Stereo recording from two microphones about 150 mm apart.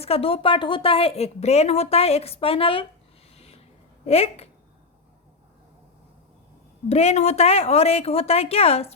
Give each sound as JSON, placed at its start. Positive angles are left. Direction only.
{"t": 0.0, "sound": "speech", "side_deg": 40}
{"t": 3.3, "sound": "a sound", "side_deg": 45}
{"t": 4.0, "sound": "a woman's voice", "side_deg": 40}
{"t": 6.8, "sound": "a woman's voice", "side_deg": 45}